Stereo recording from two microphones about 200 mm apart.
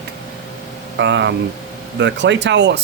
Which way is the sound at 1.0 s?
65° right (ahead or behind).